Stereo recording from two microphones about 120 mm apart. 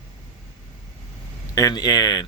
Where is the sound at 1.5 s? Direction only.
30° left (ahead or behind).